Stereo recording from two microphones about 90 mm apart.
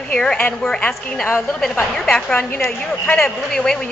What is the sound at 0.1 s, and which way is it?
A woman's voice, 10° left (ahead or behind).